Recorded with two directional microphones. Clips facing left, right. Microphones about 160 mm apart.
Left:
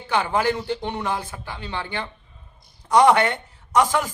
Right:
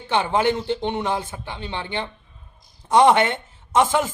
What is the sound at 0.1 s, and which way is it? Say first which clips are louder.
A man's voice: right 2 dB; 25° right (ahead or behind).